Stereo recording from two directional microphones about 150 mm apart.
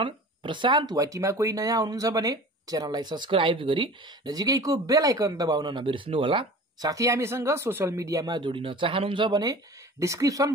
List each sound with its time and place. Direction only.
0.0 s speech: 35° right (ahead or behind)